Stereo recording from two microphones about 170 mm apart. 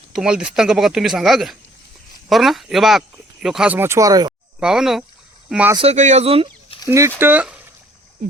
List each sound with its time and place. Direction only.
0.1 s speech: 5° right (ahead or behind); by 4.4 s 20° right (ahead or behind)
4.6 s speech: 5° right (ahead or behind)
5.7 s speech: 35° right (ahead or behind)
6.8 s speech: 15° right (ahead or behind)